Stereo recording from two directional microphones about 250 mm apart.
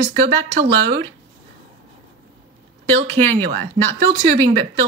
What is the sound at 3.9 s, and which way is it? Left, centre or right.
Speech, right.